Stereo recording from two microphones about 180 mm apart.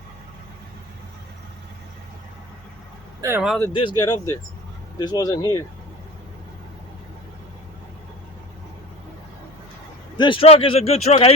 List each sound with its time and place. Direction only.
3.2 s speech: 15° right (ahead or behind)
3.7 s speech: 25° left (ahead or behind)
10.2 s speech: 30° left (ahead or behind)